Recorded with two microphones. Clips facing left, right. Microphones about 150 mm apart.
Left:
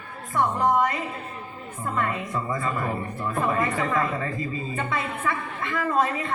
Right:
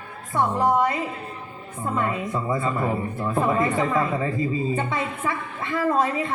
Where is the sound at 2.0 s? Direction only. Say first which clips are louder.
Right 2 dB; 20° right (ahead or behind).